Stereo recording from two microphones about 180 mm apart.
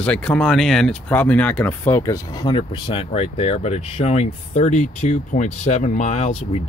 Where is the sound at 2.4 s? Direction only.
30° left (ahead or behind).